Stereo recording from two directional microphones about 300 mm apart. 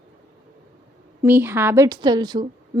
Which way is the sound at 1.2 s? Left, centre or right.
Centre.